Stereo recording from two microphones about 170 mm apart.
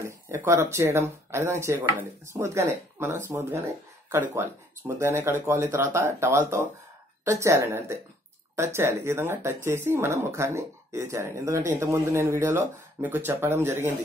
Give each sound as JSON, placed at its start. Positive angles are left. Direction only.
{"t": 0.0, "sound": "speech", "side_deg": -15}